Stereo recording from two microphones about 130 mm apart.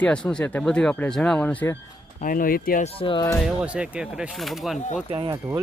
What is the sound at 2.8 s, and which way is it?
Speech, 40° left (ahead or behind).